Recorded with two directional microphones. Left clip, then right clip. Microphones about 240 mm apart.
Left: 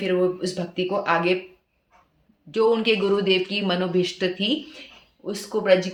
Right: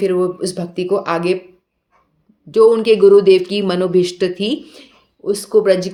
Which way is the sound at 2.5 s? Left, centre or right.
Right.